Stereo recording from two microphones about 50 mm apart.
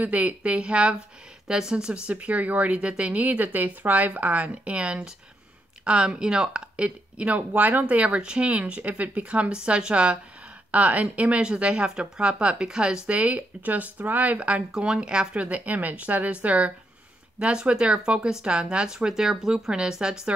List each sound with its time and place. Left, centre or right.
0.0 s speech: right
2.1 s speech: right
10.7 s speech: right; by 20.3 s centre